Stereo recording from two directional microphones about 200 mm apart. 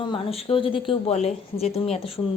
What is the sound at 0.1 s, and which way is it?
A woman's voice, 30° left (ahead or behind).